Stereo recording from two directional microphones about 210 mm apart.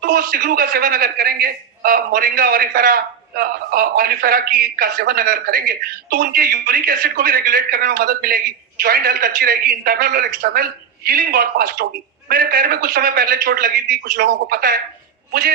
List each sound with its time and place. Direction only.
0.0 s a man's voice: 45° right (ahead or behind)